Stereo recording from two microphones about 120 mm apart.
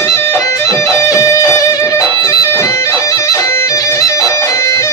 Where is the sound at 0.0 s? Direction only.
20° left (ahead or behind).